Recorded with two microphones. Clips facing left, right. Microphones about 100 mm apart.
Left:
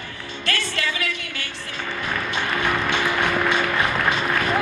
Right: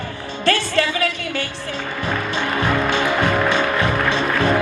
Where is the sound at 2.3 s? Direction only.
30° right (ahead or behind).